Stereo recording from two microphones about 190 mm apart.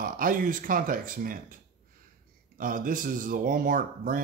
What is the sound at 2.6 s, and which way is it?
Speech, 45° right (ahead or behind).